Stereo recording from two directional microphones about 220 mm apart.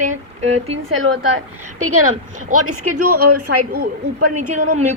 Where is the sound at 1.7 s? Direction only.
75° right (ahead or behind).